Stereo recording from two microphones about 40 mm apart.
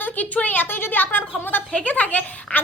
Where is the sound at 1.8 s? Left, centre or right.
Left.